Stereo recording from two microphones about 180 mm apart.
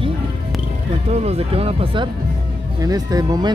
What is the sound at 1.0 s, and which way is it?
Speech, 35° right (ahead or behind).